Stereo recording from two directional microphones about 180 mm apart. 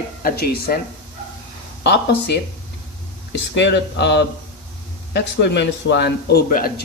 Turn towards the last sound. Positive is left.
turn(degrees=55)  # may be behind; listen again after turning